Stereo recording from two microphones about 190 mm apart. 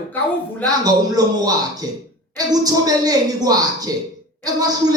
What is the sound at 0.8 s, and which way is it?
Speech, 20° right (ahead or behind).